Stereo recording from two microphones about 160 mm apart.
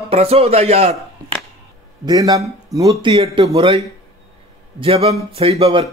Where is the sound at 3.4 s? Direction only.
30° right (ahead or behind).